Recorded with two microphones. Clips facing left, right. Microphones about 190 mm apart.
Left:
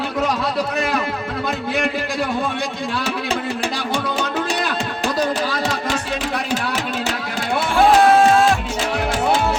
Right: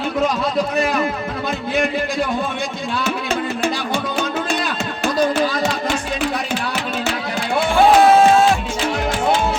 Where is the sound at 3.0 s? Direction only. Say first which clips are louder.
Right 3 dB; 35° left (ahead or behind).